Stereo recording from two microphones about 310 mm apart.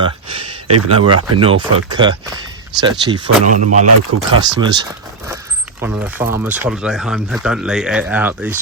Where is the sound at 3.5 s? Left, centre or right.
Right.